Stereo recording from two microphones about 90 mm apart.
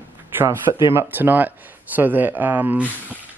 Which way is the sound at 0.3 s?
25° right (ahead or behind).